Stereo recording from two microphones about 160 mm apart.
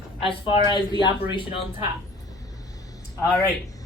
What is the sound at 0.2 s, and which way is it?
Speech, 30° left (ahead or behind).